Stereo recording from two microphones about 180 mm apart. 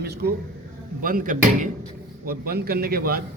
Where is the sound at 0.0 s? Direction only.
60° right (ahead or behind).